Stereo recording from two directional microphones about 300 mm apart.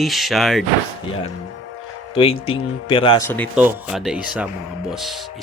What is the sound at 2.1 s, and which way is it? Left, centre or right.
Speech, centre.